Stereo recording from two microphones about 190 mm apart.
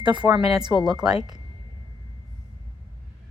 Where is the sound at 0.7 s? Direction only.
10° right (ahead or behind).